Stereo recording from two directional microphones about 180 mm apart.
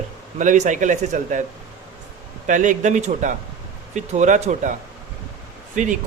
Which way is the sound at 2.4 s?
45° right (ahead or behind).